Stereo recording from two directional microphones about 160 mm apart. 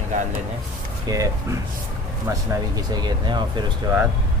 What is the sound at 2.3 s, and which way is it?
Speech, 25° right (ahead or behind).